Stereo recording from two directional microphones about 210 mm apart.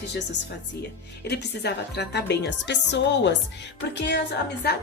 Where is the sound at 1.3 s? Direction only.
50° left (ahead or behind).